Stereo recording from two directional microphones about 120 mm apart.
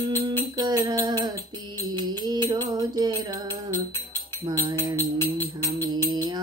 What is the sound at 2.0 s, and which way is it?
Music, 35° right (ahead or behind).